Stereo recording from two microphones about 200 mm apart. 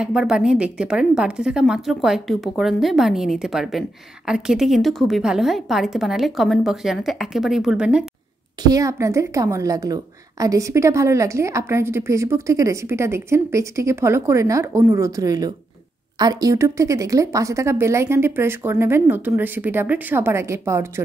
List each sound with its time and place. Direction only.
0.0 s a woman's voice: centre (ahead or behind)
8.6 s a woman's voice: 15° right (ahead or behind)